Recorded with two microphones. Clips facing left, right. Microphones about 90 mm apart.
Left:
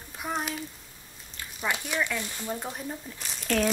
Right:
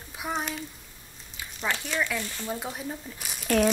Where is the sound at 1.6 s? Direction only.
15° left (ahead or behind).